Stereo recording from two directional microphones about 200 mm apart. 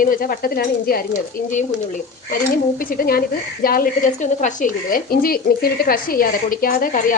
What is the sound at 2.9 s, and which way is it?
Speech, 45° left (ahead or behind).